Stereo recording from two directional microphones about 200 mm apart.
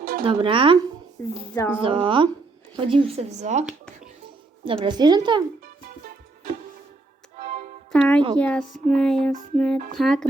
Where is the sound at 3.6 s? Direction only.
5° right (ahead or behind).